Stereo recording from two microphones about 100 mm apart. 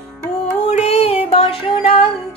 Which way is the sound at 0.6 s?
90° left.